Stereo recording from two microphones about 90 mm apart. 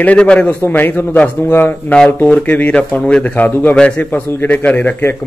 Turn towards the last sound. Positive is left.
turn(degrees=25)  # may be behind; listen again after turning